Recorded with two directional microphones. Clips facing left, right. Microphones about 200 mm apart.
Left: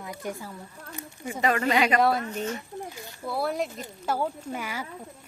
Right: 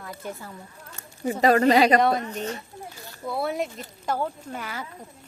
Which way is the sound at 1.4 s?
35° right (ahead or behind).